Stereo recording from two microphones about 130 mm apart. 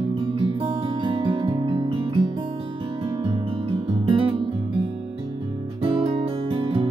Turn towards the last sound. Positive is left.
turn(degrees=-40)  # may be behind; listen again after turning